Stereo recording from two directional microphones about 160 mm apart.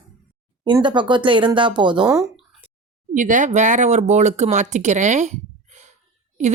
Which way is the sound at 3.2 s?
50° right (ahead or behind).